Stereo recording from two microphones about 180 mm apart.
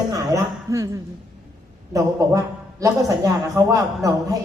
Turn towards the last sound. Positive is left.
turn(degrees=-20)  # may be behind; listen again after turning